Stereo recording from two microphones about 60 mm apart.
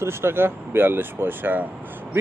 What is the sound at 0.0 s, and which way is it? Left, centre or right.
Speech, right.